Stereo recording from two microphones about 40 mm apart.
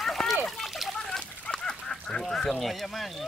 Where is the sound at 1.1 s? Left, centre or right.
Left.